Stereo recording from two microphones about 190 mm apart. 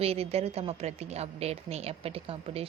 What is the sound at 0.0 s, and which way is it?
A woman's voice, 30° right (ahead or behind).